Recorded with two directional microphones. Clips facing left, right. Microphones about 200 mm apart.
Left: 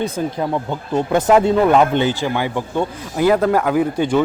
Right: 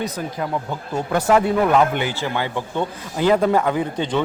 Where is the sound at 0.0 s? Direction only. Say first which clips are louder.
Left 5 dB; 25° left (ahead or behind).